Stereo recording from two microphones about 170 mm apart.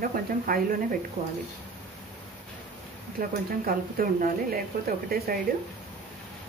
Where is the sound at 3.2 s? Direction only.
55° right (ahead or behind).